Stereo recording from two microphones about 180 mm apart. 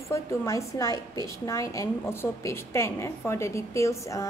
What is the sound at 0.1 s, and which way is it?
A woman's voice, 15° left (ahead or behind).